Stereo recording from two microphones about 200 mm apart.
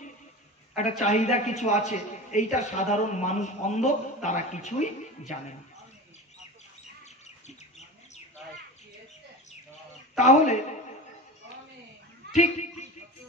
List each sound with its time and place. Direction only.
0.7 s a man's voice: 35° left (ahead or behind)
10.1 s a man's voice: 35° left (ahead or behind)
12.3 s a sound: 35° left (ahead or behind)